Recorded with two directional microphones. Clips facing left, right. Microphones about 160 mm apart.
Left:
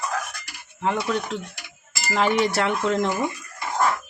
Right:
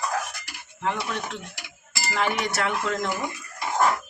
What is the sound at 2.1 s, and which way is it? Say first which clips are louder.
Cowbell: left 5 dB; 30° left (ahead or behind).